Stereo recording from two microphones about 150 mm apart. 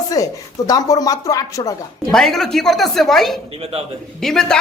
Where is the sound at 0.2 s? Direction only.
20° left (ahead or behind).